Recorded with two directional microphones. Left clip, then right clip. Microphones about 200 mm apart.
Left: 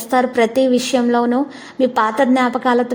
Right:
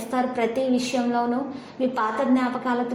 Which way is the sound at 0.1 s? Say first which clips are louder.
Left 9 dB; 45° left (ahead or behind).